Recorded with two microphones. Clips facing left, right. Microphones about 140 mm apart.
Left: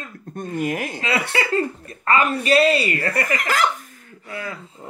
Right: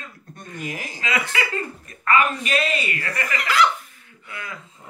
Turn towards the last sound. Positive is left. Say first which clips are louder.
# left 5 dB
turn(degrees=35)  # may be behind; listen again after turning